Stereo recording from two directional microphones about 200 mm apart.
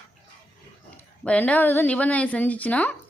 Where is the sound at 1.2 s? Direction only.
5° left (ahead or behind).